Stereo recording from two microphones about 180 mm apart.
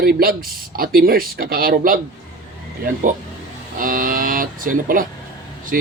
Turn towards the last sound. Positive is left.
turn(degrees=-50)  # may be behind; listen again after turning